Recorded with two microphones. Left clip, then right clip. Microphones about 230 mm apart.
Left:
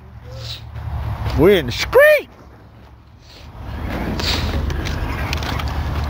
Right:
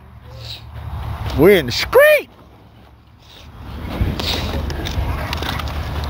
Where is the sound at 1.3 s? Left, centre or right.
Centre.